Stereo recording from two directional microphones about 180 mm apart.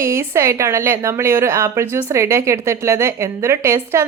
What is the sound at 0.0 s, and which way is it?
Speech, 15° right (ahead or behind).